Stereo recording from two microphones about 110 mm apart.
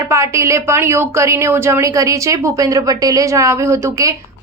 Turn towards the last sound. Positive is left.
turn(degrees=-30)  # may be behind; listen again after turning